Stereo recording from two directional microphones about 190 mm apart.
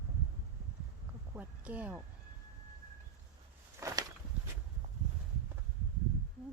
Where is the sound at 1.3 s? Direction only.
5° right (ahead or behind).